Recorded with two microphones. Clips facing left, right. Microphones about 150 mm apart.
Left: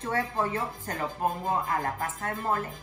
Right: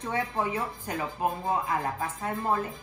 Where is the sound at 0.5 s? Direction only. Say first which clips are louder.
Even; 5° right (ahead or behind).